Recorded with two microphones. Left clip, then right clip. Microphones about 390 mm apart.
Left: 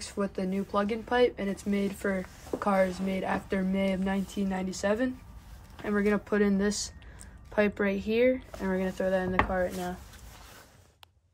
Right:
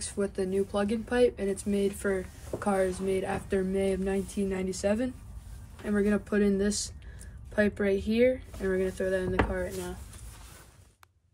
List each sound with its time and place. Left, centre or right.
0.0 s speech: centre